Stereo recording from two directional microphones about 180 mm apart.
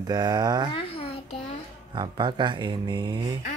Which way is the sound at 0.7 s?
30° left (ahead or behind).